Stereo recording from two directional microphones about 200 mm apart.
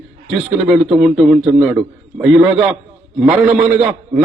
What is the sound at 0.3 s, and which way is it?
A man's voice, 5° right (ahead or behind).